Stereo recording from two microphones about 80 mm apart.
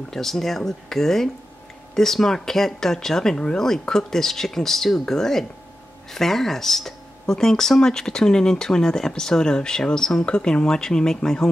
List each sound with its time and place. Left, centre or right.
0.1 s speech: centre